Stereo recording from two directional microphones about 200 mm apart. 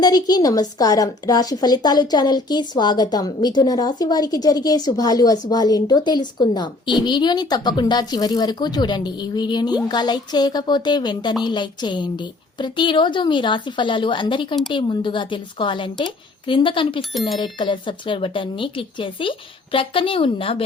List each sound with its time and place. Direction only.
0.0 s a woman's voice: 20° left (ahead or behind)
17.0 s speech: centre (ahead or behind)
17.4 s a woman's voice: 25° left (ahead or behind)